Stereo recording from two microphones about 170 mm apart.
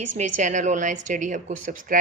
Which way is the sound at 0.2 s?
45° right (ahead or behind).